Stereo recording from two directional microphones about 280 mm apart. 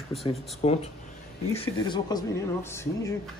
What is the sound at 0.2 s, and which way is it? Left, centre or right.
Speech, left.